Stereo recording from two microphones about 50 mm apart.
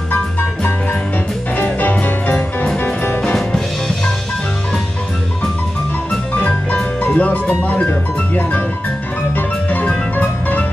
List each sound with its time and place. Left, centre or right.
1.6 s music: left
2.8 s music: left
3.3 s music: centre
7.2 s speech: left
9.3 s music: left